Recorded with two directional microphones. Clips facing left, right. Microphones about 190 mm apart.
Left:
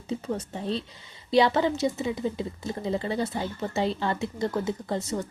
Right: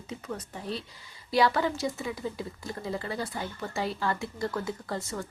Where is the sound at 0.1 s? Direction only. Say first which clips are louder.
Left 7 dB; 30° left (ahead or behind).